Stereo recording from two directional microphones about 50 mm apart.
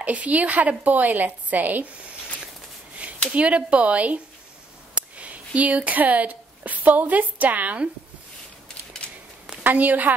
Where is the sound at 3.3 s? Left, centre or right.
Right.